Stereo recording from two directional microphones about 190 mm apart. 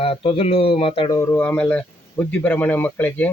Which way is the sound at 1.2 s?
10° left (ahead or behind).